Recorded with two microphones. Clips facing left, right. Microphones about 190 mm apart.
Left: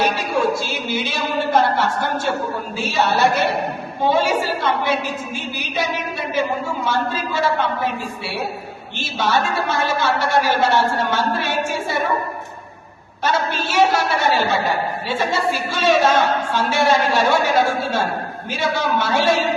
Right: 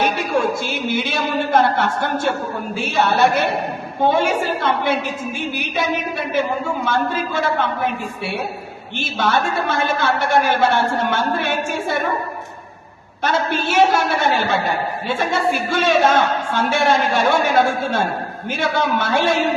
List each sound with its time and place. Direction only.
0.0 s a sound: 55° right (ahead or behind)
2.7 s a woman's voice: 55° right (ahead or behind)
13.2 s a woman's voice: 55° right (ahead or behind)